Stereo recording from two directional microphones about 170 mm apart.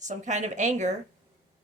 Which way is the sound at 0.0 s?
45° right (ahead or behind).